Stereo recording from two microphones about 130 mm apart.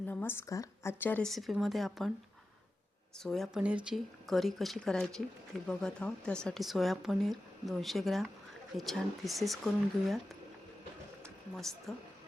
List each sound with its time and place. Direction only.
0.1 s speech: 15° left (ahead or behind)
1.2 s speech: centre (ahead or behind)
3.2 s speech: centre (ahead or behind)
11.2 s a sound: centre (ahead or behind)